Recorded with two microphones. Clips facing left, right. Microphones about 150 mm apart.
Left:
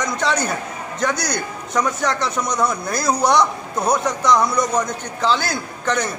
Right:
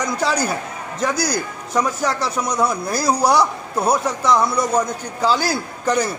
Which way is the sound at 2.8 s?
30° right (ahead or behind).